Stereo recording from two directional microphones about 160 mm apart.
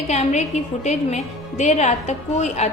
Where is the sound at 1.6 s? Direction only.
45° left (ahead or behind).